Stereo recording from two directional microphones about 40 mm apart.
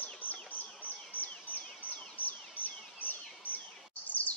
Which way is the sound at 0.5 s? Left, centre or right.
Left.